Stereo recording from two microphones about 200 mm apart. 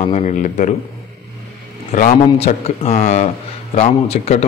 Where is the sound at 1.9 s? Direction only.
40° left (ahead or behind).